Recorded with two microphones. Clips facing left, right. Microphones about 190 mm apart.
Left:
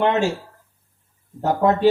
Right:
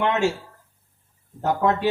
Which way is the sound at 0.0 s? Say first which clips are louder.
Left 3 dB; 35° left (ahead or behind).